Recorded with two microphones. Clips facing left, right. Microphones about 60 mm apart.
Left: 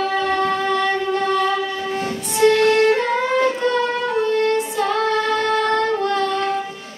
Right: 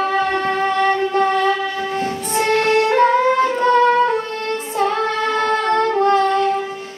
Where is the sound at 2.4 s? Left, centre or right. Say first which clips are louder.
Left 2 dB; right.